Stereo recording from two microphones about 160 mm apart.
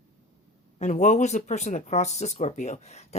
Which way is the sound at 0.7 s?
45° left (ahead or behind).